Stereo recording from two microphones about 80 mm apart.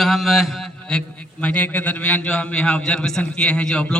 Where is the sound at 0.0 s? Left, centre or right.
Centre.